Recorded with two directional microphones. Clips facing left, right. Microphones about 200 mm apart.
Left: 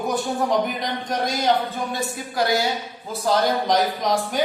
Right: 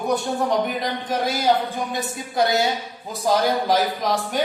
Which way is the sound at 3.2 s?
10° right (ahead or behind).